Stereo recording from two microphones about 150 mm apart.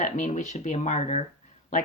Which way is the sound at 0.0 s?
55° left (ahead or behind).